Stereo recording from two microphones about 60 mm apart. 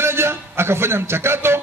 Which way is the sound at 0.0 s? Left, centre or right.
Right.